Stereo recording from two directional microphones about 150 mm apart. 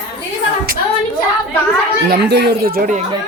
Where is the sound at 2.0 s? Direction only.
90° right.